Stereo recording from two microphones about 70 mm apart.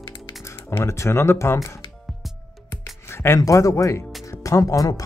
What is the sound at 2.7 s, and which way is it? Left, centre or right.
Music, left.